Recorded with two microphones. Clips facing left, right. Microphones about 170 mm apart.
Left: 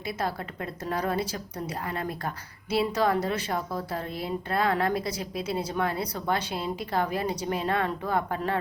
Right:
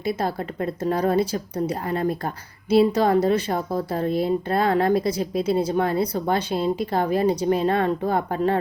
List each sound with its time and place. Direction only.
0.0 s a woman's voice: 25° right (ahead or behind)